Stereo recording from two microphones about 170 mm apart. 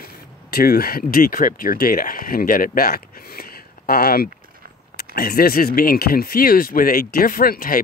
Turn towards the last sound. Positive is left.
turn(degrees=60)  # may be behind; listen again after turning